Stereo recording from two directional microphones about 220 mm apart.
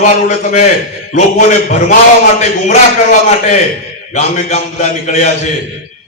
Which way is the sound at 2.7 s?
35° left (ahead or behind).